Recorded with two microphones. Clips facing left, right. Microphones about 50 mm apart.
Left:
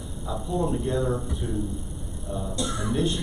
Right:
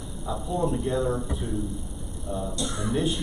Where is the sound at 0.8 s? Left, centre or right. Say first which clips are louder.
Even; centre.